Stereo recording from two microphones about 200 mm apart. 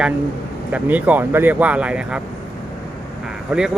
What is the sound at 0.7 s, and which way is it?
Speech, 5° right (ahead or behind).